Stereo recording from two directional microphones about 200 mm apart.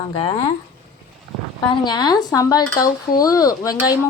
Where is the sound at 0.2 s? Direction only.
30° left (ahead or behind).